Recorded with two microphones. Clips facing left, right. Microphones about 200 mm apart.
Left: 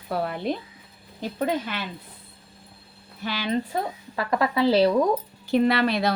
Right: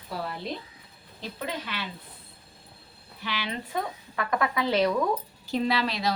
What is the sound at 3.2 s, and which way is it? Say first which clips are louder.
Speech: left 7 dB; 45° left (ahead or behind).